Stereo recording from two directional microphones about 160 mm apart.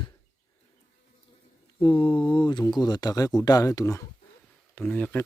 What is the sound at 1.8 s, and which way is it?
Speech, 35° left (ahead or behind).